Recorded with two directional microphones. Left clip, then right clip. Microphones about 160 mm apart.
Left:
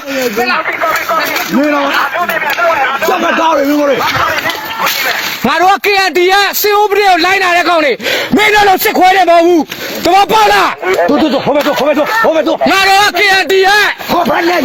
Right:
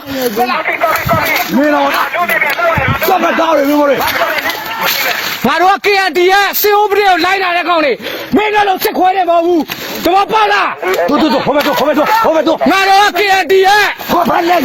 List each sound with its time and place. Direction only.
5.5 s a man's voice: 15° left (ahead or behind)
7.7 s speech: 30° left (ahead or behind)
8.4 s speech: 50° left (ahead or behind)
10.1 s speech: 40° left (ahead or behind)
10.8 s speech: 55° left (ahead or behind)
11.3 s speech: 40° left (ahead or behind)
12.7 s a man's voice: 20° right (ahead or behind)
14.3 s speech: centre (ahead or behind)